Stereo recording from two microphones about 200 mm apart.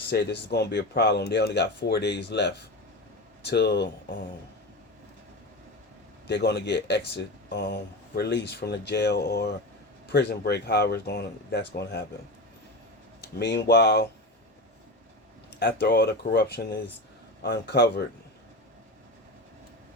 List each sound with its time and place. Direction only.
0.1 s speech: 55° left (ahead or behind)
6.2 s speech: 55° left (ahead or behind)
13.4 s speech: 60° left (ahead or behind)
15.5 s speech: 60° left (ahead or behind)